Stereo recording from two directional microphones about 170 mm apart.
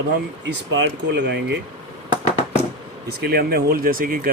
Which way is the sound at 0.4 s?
90° right.